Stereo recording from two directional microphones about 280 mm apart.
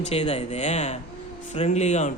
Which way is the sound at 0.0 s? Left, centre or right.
Left.